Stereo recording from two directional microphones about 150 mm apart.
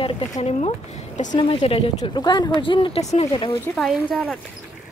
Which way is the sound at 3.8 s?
Centre (ahead or behind).